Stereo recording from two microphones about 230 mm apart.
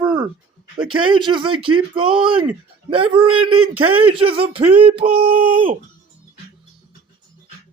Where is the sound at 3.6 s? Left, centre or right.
Right.